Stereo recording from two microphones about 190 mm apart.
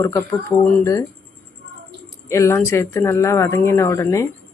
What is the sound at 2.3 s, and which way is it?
Speech, 15° left (ahead or behind).